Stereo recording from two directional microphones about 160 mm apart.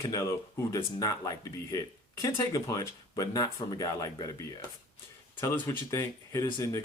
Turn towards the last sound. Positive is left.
turn(degrees=20)  # may be behind; listen again after turning